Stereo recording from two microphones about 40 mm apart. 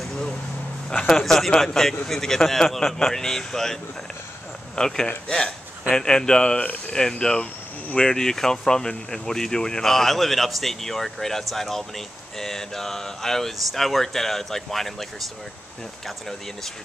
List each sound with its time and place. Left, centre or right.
0.8 s speech: centre